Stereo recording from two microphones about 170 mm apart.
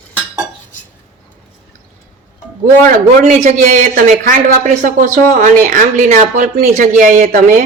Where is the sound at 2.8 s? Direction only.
45° right (ahead or behind).